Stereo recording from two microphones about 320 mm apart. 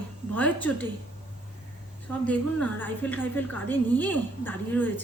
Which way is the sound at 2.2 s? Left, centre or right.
Centre.